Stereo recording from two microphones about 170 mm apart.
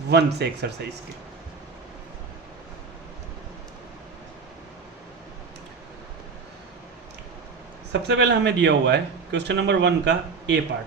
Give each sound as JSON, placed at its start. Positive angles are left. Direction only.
{"t": 0.1, "sound": "speech", "side_deg": -75}
{"t": 8.0, "sound": "a man's voice", "side_deg": -85}